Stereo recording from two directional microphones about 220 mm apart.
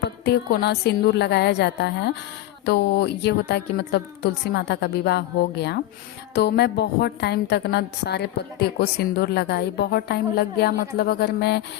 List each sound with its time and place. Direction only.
0.3 s a woman's voice: 45° left (ahead or behind)